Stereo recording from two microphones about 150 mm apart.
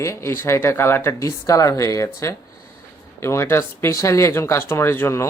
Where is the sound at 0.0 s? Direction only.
20° left (ahead or behind).